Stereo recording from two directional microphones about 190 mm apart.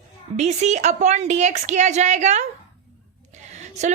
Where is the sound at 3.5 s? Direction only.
40° right (ahead or behind).